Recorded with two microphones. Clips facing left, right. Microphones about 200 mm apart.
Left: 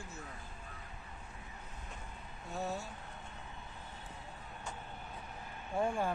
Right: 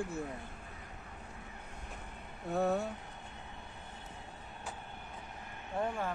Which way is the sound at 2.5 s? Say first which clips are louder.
Right 8 dB; 60° right (ahead or behind).